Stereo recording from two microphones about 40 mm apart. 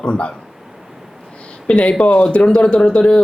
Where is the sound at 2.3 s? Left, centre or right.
Left.